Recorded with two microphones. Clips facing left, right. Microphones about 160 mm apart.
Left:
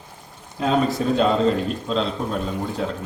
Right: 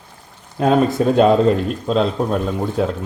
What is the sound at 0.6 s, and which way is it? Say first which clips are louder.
Speech: right 5 dB; 50° right (ahead or behind).